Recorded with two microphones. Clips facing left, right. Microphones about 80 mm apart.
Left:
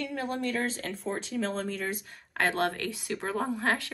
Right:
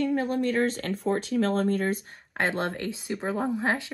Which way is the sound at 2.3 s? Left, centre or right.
Right.